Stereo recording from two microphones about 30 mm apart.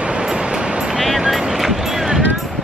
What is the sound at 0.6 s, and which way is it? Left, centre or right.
Music, right.